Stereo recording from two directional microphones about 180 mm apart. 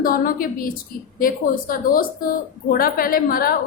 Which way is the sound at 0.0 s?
50° left (ahead or behind).